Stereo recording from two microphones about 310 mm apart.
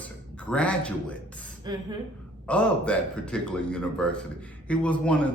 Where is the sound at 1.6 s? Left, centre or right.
Centre.